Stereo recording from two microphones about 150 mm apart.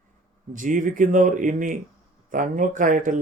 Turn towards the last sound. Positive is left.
turn(degrees=-60)  # may be behind; listen again after turning